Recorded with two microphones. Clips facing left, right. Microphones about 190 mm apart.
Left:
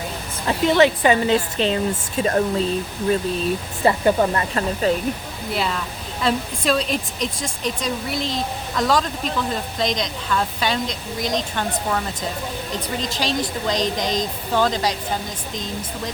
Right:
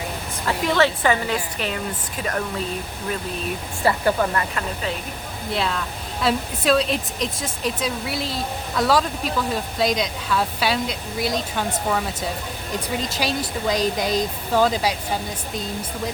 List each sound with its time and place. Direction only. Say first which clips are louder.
0.4 s a woman's voice: left 4 dB; 20° left (ahead or behind)
3.8 s a woman's voice: left 3 dB; 25° left (ahead or behind)
4.8 s speech: left 10 dB; 40° left (ahead or behind)
5.5 s speech: even; centre (ahead or behind)